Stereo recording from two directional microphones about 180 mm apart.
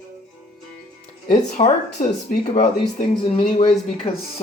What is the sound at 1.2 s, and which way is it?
Speech, 40° left (ahead or behind).